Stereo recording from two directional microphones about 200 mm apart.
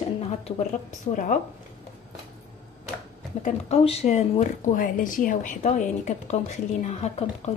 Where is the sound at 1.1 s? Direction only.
40° left (ahead or behind).